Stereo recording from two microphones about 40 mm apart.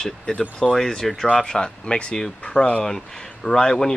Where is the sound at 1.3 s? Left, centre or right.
Left.